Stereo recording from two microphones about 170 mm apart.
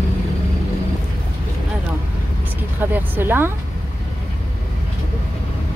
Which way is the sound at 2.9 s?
10° right (ahead or behind).